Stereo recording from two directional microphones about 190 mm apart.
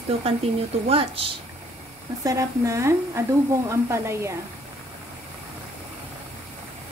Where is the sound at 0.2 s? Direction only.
30° right (ahead or behind).